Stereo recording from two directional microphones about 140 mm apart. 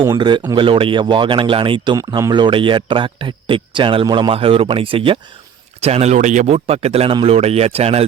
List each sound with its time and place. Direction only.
0.2 s a man's voice: 35° right (ahead or behind)
2.0 s a man's voice: 25° right (ahead or behind); by 8.0 s 45° right (ahead or behind)